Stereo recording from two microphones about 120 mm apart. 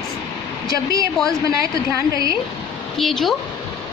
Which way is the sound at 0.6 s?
30° right (ahead or behind).